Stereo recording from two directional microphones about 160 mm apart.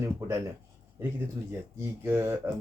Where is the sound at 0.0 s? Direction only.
20° right (ahead or behind).